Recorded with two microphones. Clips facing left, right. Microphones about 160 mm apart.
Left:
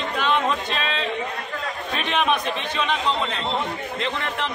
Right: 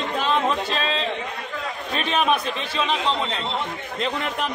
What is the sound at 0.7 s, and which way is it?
Speech, 35° right (ahead or behind).